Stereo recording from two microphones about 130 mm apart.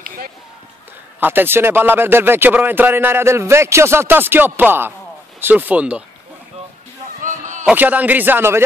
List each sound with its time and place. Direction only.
1.2 s a man's voice: 15° right (ahead or behind)
7.2 s basketball bounce: 75° right (ahead or behind)
7.6 s a man's voice: 10° right (ahead or behind)